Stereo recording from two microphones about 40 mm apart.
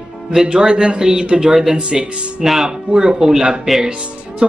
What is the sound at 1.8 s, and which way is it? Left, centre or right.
Speech, right.